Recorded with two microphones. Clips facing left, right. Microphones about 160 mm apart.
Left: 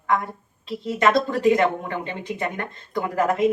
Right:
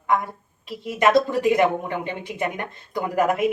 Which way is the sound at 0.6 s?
10° right (ahead or behind).